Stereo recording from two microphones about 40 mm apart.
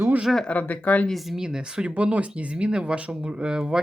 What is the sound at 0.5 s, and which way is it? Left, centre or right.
Speech, left.